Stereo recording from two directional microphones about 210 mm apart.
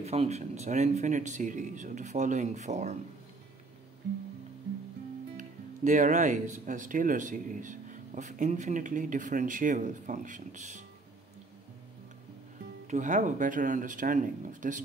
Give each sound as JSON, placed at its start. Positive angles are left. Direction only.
{"t": 0.0, "sound": "speech", "side_deg": -30}
{"t": 5.4, "sound": "speech", "side_deg": -35}
{"t": 12.8, "sound": "speech", "side_deg": -35}